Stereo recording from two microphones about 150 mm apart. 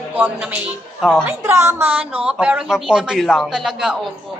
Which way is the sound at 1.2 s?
15° right (ahead or behind).